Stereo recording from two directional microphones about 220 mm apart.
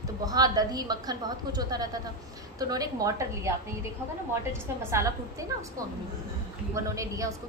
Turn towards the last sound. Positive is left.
turn(degrees=-15)  # may be behind; listen again after turning